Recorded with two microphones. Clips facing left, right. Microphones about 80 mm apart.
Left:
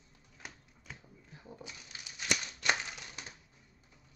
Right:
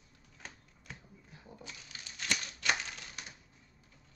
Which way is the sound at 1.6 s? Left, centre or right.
Left.